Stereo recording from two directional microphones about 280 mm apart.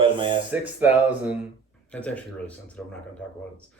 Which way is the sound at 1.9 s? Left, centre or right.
Centre.